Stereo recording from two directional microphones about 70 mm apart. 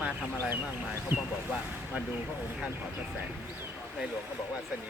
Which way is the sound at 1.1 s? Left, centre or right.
Right.